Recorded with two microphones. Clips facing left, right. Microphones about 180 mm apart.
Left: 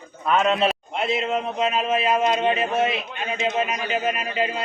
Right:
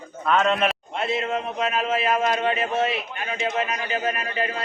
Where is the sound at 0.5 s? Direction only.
20° left (ahead or behind).